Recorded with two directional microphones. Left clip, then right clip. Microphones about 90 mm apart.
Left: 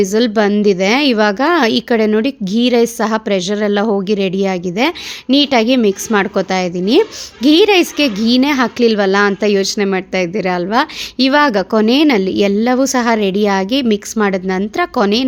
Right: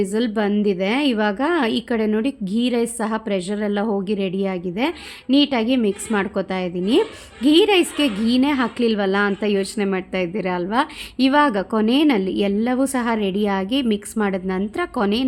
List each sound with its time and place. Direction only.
0.0 s a woman's voice: 35° left (ahead or behind); by 15.2 s 20° left (ahead or behind)